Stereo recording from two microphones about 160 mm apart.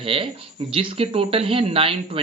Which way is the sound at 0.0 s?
35° right (ahead or behind).